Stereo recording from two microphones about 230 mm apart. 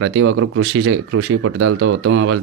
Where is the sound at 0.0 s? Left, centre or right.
Right.